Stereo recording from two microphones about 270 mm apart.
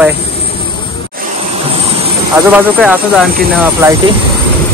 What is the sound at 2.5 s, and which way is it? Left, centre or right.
Speech, centre.